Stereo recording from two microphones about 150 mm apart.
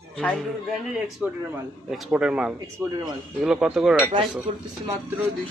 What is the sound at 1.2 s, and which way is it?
Speech, 10° right (ahead or behind).